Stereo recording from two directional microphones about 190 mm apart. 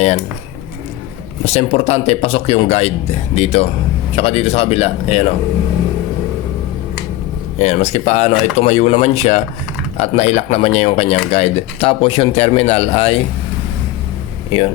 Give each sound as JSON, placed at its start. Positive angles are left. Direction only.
{"t": 1.5, "sound": "speech", "side_deg": 35}
{"t": 7.6, "sound": "speech", "side_deg": 35}